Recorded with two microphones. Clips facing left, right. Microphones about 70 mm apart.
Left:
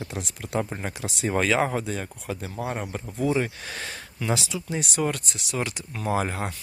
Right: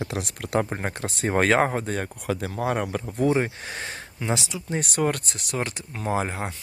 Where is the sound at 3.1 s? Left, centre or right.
Right.